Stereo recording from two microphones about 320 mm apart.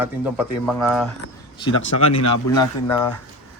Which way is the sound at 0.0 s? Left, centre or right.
Centre.